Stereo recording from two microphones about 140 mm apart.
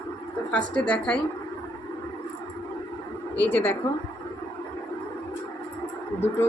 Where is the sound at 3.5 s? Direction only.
15° left (ahead or behind).